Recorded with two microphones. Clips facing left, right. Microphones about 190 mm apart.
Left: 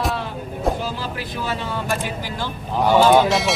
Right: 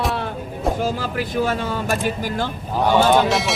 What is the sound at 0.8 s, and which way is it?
Vehicle, 45° right (ahead or behind).